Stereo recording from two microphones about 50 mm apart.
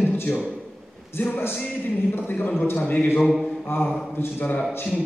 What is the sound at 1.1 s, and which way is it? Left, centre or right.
Speech, left.